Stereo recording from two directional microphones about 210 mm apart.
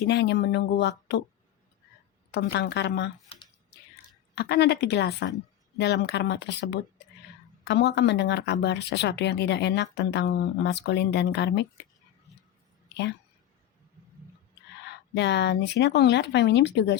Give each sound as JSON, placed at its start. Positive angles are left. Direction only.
{"t": 0.1, "sound": "a woman's voice", "side_deg": 55}
{"t": 2.3, "sound": "a woman's voice", "side_deg": 55}
{"t": 4.4, "sound": "a woman's voice", "side_deg": 50}
{"t": 14.8, "sound": "speech", "side_deg": 55}